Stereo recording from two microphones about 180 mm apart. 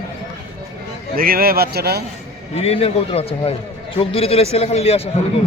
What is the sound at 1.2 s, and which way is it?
Speech, 55° right (ahead or behind).